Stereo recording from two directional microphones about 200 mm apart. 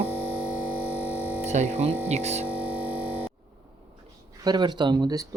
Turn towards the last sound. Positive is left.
turn(degrees=-25)  # may be behind; listen again after turning